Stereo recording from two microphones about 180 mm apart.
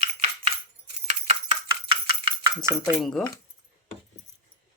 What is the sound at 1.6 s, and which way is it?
Chopping, 20° right (ahead or behind).